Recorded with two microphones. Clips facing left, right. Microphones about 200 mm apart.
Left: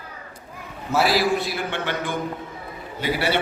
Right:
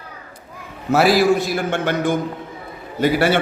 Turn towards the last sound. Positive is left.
turn(degrees=-45)  # may be behind; listen again after turning